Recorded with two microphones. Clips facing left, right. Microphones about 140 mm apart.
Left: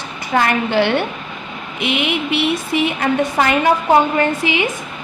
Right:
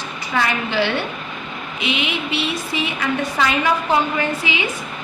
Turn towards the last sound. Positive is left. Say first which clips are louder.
# left 5 dB
turn(degrees=55)  # may be behind; listen again after turning